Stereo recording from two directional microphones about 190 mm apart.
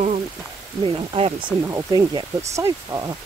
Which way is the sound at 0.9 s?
30° right (ahead or behind).